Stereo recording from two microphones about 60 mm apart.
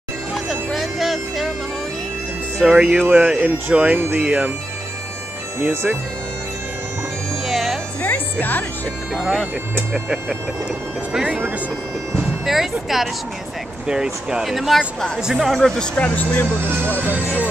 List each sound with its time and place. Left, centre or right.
0.3 s music: centre
2.8 s speech: centre
3.3 s speech: right
5.6 s speech: right
7.4 s music: centre
8.0 s music: left
9.1 s speech: centre
11.2 s speech: right
12.5 s speech: centre
16.2 s speech: left